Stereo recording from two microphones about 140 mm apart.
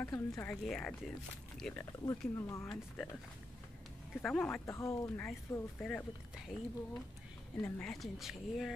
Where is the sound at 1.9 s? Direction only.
20° left (ahead or behind).